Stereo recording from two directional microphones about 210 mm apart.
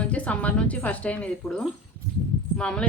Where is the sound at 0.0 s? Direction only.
5° left (ahead or behind).